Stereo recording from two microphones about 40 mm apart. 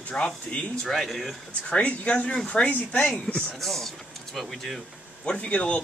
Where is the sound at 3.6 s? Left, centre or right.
Centre.